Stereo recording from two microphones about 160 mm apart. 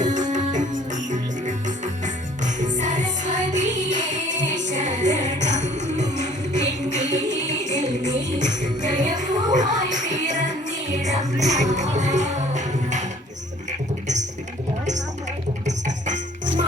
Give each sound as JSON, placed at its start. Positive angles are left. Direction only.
{"t": 0.0, "sound": "music", "side_deg": -50}
{"t": 15.6, "sound": "music", "side_deg": -50}